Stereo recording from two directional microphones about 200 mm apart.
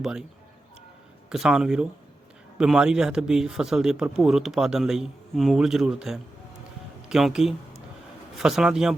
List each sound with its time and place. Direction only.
0.0 s speech: 5° right (ahead or behind)
1.3 s speech: 5° right (ahead or behind)